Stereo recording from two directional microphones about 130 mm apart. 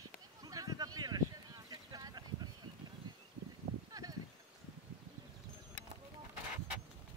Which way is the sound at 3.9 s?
30° right (ahead or behind).